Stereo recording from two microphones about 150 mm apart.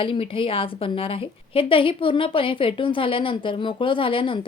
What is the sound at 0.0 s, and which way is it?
A woman's voice, 35° left (ahead or behind).